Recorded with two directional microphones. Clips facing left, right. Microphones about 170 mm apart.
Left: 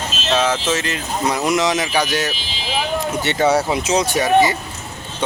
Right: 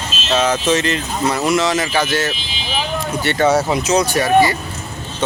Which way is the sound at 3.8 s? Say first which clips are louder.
Right 2 dB; 25° left (ahead or behind).